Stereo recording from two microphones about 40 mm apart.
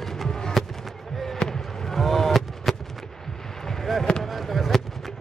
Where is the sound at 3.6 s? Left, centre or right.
Centre.